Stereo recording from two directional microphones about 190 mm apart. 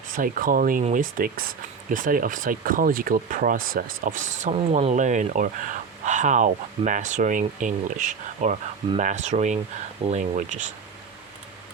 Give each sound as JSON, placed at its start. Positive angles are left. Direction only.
{"t": 0.2, "sound": "speech", "side_deg": -45}